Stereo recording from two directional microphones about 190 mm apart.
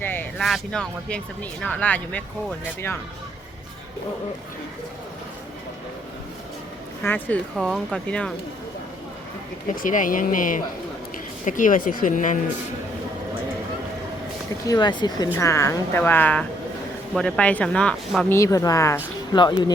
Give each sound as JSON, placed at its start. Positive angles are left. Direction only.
{"t": 0.0, "sound": "a sound", "side_deg": 10}
{"t": 0.3, "sound": "speech", "side_deg": 0}
{"t": 7.0, "sound": "speech", "side_deg": 10}
{"t": 7.5, "sound": "speech", "side_deg": 0}
{"t": 9.6, "sound": "speech", "side_deg": 45}
{"t": 14.7, "sound": "speech", "side_deg": 25}
{"t": 18.3, "sound": "speech", "side_deg": 15}